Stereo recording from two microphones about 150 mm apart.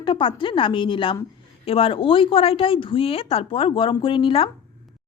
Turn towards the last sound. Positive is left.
turn(degrees=35)  # may be behind; listen again after turning